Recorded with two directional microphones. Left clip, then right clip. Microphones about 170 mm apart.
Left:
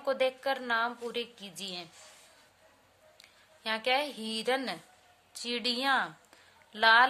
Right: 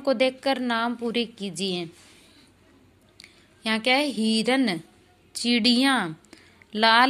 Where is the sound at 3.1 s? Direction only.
20° right (ahead or behind).